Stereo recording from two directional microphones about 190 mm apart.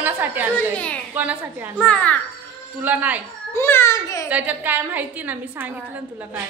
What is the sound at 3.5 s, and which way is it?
Speech, 15° left (ahead or behind).